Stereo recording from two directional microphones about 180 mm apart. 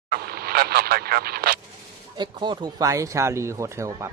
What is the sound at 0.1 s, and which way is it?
Vehicle, 60° right (ahead or behind).